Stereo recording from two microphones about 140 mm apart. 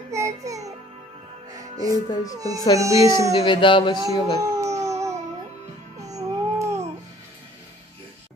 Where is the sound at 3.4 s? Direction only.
35° left (ahead or behind).